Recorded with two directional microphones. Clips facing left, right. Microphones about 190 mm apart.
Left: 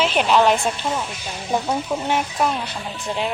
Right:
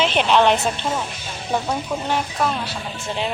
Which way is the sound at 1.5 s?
15° left (ahead or behind).